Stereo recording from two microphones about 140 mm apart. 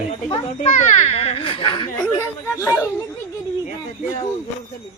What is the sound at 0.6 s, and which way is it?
A child's voice, 55° left (ahead or behind).